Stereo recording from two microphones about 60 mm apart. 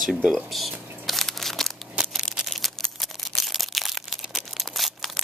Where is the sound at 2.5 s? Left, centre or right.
Centre.